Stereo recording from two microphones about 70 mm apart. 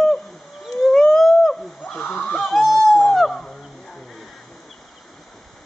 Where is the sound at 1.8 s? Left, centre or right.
Centre.